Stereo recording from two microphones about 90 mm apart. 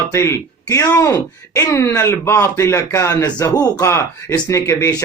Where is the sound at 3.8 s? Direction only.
30° left (ahead or behind).